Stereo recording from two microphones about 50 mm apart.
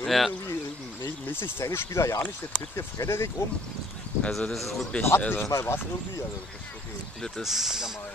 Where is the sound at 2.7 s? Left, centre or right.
Left.